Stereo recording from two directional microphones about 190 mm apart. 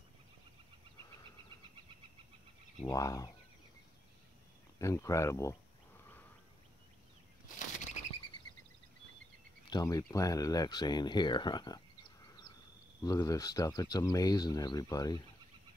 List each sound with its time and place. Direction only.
2.8 s speech: 20° left (ahead or behind)
4.7 s speech: 15° left (ahead or behind)
7.4 s bird flight: 40° left (ahead or behind)
9.7 s speech: 20° left (ahead or behind)
13.0 s speech: 20° left (ahead or behind)